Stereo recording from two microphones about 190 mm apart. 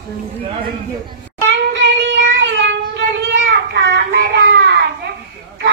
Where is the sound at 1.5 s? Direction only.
70° right (ahead or behind).